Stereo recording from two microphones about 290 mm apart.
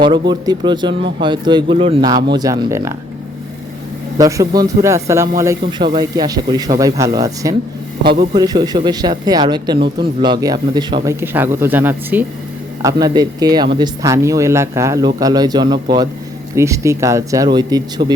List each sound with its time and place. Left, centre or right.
0.0 s speech: centre
4.2 s speech: centre